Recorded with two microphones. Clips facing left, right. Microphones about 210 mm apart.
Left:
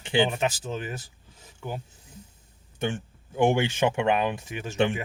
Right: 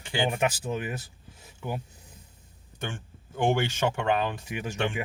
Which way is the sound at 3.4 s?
15° left (ahead or behind).